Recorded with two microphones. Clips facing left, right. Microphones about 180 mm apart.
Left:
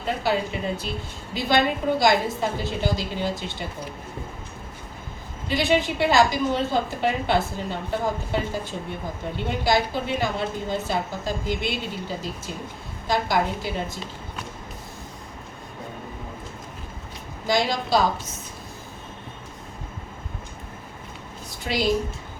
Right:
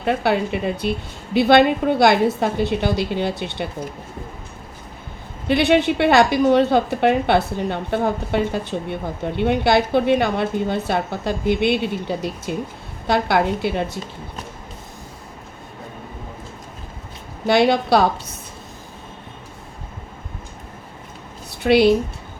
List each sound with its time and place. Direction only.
0.0 s a woman's voice: 65° right (ahead or behind)
5.5 s a woman's voice: 65° right (ahead or behind)
17.4 s a woman's voice: 65° right (ahead or behind)
21.6 s a woman's voice: 65° right (ahead or behind)